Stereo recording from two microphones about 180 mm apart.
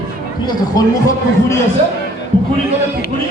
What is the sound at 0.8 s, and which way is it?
Speech, 20° left (ahead or behind).